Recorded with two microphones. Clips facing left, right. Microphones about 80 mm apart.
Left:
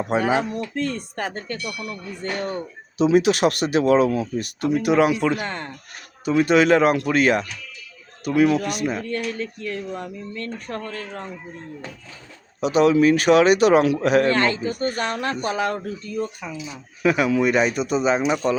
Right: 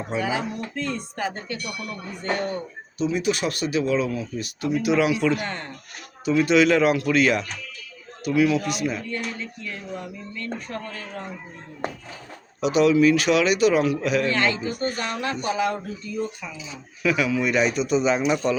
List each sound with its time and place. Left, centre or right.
0.1 s speech: left
2.2 s speech: right
3.0 s speech: left
4.7 s a man's voice: left
6.3 s a man's voice: left
12.5 s a man's voice: left
17.0 s a man's voice: left